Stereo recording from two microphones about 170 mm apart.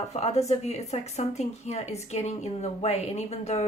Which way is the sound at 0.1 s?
40° left (ahead or behind).